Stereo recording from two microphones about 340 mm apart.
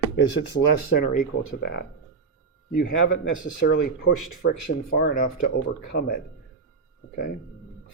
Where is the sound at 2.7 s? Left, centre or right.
Left.